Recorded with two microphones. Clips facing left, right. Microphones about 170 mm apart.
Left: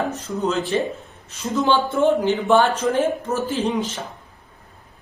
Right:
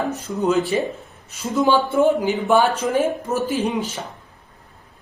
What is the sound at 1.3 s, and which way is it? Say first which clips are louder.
Speech: right 2 dB; centre (ahead or behind).